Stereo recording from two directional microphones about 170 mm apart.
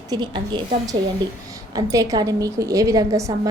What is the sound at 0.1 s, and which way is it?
A woman's voice, 25° right (ahead or behind).